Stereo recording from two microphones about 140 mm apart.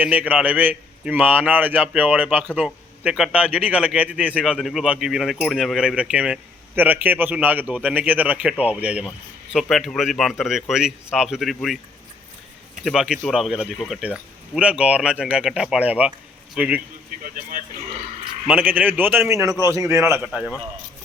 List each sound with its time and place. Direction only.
0.0 s a man's voice: 10° right (ahead or behind)
12.8 s a man's voice: 5° right (ahead or behind)
17.2 s speech: 90° right
18.4 s a man's voice: 10° right (ahead or behind)
20.2 s speech: 5° right (ahead or behind)